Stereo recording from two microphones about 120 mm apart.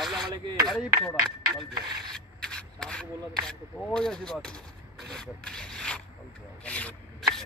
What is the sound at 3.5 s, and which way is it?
Speech, 5° left (ahead or behind).